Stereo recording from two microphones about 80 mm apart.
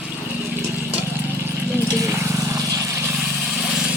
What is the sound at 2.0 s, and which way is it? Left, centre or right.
Vehicle, right.